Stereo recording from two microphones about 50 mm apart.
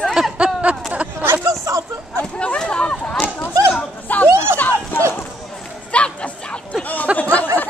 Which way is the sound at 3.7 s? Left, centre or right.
Left.